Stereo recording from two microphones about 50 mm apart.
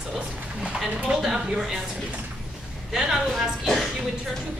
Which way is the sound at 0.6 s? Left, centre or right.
Centre.